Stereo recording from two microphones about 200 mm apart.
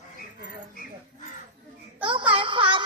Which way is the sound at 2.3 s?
25° right (ahead or behind).